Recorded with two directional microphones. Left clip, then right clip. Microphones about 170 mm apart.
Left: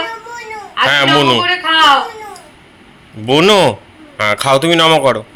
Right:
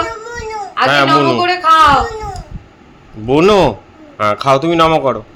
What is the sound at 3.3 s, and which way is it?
A man's voice, 5° right (ahead or behind).